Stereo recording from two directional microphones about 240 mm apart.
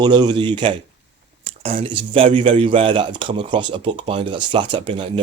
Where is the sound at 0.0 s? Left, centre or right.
Centre.